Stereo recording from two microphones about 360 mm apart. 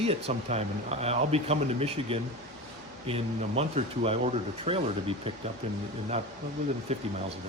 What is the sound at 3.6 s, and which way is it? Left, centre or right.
Speech, centre.